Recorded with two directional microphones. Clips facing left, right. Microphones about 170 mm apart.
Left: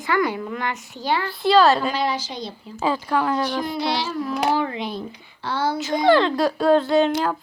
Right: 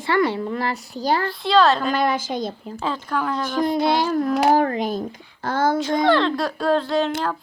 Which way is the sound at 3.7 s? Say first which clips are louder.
Right 5 dB; 50° right (ahead or behind).